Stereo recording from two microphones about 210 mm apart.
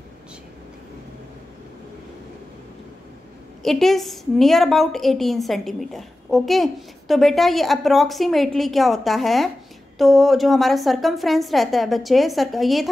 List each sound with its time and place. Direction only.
3.6 s a woman's voice: centre (ahead or behind)